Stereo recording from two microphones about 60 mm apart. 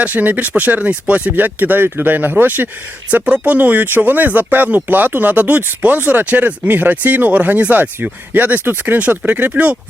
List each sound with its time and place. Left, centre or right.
0.0 s speech: right